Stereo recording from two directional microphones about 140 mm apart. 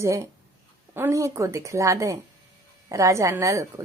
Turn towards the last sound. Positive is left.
turn(degrees=-20)  # may be behind; listen again after turning